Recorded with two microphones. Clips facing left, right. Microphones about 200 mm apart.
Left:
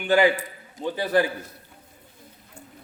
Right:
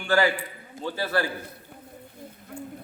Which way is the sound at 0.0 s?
20° left (ahead or behind).